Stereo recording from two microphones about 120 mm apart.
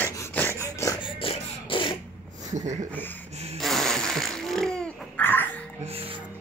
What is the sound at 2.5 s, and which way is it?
Speech, 80° right.